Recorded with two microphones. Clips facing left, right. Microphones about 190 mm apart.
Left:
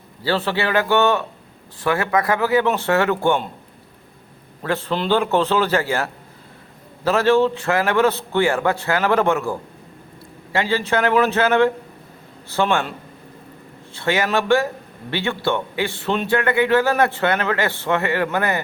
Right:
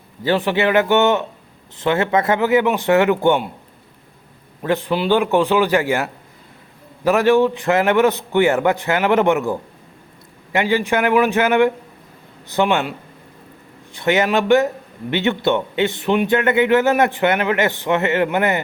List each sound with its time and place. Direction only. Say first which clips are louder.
0.2 s a man's voice: right 4 dB; 20° right (ahead or behind)
4.6 s a man's voice: right 3 dB; 15° right (ahead or behind)
13.9 s a man's voice: right 3 dB; 20° right (ahead or behind)